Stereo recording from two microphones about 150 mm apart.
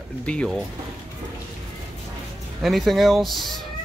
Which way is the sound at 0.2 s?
5° left (ahead or behind).